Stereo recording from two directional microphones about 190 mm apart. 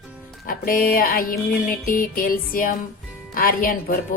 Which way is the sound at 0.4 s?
50° left (ahead or behind).